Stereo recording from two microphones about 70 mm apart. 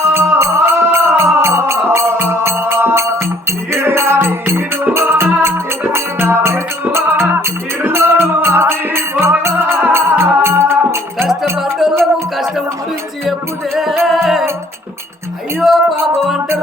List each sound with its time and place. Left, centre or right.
0.1 s music: right
11.6 s music: centre
14.0 s music: centre
15.6 s music: centre